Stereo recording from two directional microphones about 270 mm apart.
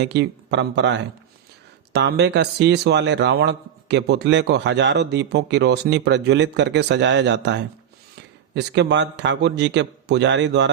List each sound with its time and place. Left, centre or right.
0.0 s speech: right